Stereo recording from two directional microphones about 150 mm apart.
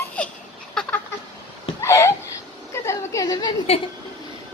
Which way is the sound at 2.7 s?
20° left (ahead or behind).